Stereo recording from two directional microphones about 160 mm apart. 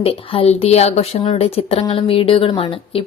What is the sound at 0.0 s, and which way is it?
Speech, 35° left (ahead or behind).